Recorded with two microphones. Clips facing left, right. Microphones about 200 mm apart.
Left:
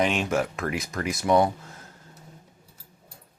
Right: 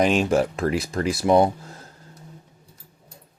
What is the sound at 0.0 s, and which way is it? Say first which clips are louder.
Speech: right 5 dB; 35° right (ahead or behind).